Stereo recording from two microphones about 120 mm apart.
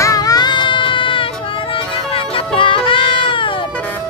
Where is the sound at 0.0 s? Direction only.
30° left (ahead or behind); by 1.2 s 45° left (ahead or behind).